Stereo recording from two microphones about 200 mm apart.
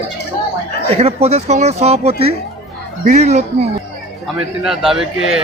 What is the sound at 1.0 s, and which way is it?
Speech, 30° right (ahead or behind).